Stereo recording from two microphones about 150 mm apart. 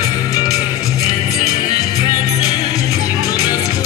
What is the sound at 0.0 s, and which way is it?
Music, 25° left (ahead or behind).